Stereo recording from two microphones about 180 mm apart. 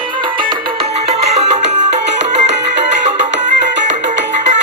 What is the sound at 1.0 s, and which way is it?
Music, 35° right (ahead or behind).